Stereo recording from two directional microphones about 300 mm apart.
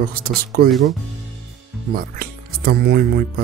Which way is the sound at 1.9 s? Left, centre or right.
Right.